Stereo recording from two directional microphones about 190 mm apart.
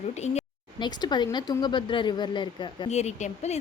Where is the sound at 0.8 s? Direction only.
20° left (ahead or behind).